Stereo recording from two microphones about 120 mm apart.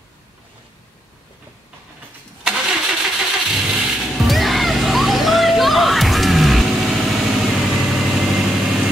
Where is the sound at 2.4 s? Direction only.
5° right (ahead or behind).